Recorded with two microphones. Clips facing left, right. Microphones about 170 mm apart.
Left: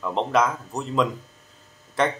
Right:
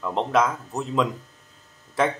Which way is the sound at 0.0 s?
Centre (ahead or behind).